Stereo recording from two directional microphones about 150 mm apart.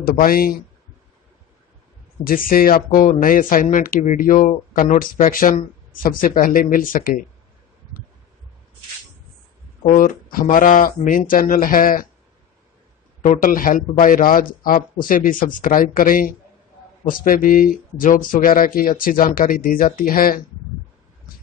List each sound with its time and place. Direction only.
0.0 s speech: 75° left (ahead or behind)
2.2 s speech: 70° left (ahead or behind)
3.2 s speech: 65° left (ahead or behind)
9.8 s speech: 65° left (ahead or behind)
13.2 s speech: 65° left (ahead or behind)